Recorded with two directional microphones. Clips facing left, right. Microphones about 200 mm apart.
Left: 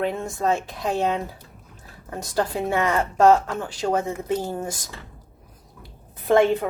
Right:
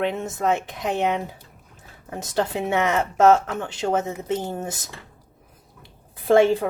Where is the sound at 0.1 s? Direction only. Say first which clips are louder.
Even; 20° right (ahead or behind).